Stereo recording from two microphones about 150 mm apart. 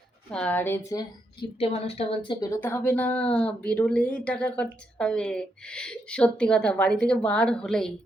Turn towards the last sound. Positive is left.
turn(degrees=5)  # may be behind; listen again after turning